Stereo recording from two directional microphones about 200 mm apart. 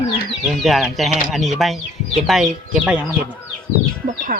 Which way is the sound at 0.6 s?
Centre (ahead or behind).